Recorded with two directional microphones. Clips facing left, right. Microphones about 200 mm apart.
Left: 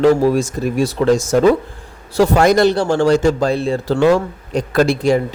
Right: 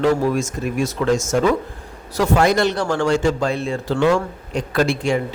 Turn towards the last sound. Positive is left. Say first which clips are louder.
# left 5 dB
turn(degrees=40)  # may be behind; listen again after turning